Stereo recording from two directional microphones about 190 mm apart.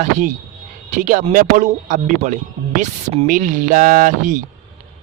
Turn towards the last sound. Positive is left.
turn(degrees=-45)  # may be behind; listen again after turning